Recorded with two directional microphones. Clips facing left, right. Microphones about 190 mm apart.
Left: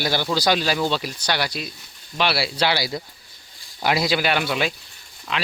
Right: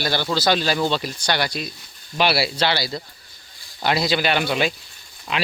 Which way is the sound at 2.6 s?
10° left (ahead or behind).